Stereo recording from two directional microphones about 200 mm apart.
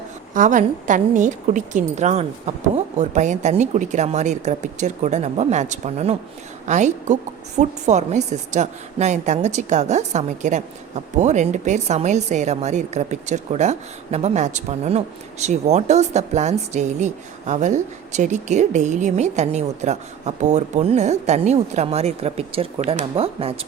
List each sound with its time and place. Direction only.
0.3 s a woman's voice: 40° right (ahead or behind)